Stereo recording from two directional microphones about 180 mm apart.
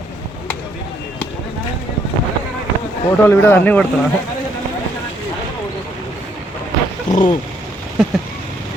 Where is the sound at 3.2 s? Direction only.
10° left (ahead or behind).